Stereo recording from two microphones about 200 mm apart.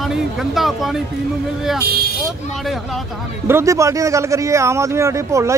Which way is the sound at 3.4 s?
15° right (ahead or behind).